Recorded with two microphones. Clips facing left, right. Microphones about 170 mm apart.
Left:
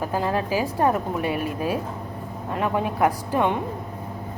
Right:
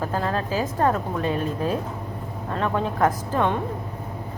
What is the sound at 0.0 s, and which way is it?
A woman's voice, 15° left (ahead or behind).